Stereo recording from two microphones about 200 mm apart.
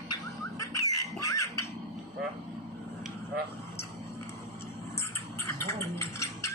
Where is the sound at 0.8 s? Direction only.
15° left (ahead or behind).